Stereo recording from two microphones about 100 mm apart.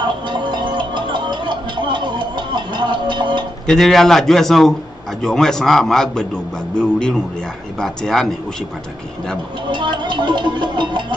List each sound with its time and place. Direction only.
0.3 s music: 50° right (ahead or behind)
3.6 s a man's voice: 5° left (ahead or behind)
9.7 s speech: 50° right (ahead or behind)